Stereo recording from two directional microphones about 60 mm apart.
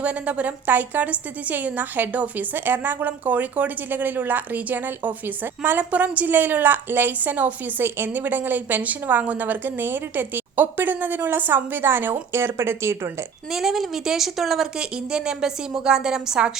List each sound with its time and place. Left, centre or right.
0.0 s a woman's voice: right
13.5 s speech: centre